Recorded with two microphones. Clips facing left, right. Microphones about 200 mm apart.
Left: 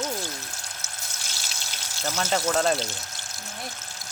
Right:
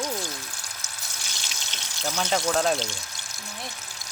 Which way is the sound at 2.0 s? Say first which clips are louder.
Even; 5° left (ahead or behind).